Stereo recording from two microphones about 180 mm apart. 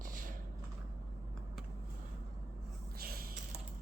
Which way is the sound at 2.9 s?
60° right (ahead or behind).